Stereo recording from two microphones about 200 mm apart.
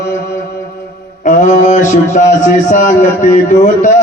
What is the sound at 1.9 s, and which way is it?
A man's voice, 35° left (ahead or behind).